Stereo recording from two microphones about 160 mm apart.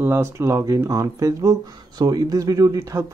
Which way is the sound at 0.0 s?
15° right (ahead or behind).